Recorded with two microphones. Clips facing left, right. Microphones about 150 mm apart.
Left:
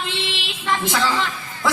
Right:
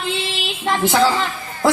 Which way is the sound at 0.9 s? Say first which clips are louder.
Right 7 dB; 35° right (ahead or behind).